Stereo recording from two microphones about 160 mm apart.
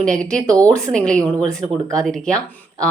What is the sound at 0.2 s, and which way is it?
A woman's voice, 5° left (ahead or behind).